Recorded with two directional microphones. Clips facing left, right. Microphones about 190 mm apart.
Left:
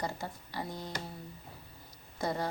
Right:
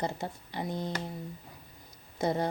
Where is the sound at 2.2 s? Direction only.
20° right (ahead or behind).